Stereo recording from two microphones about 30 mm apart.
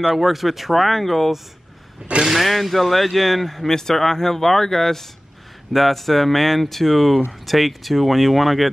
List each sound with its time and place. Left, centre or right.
0.1 s speech: centre
2.1 s speech: right
2.4 s speech: centre
3.6 s speech: centre